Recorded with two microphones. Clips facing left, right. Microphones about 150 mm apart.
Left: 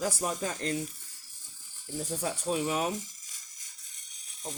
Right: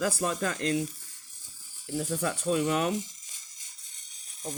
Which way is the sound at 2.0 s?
65° right (ahead or behind).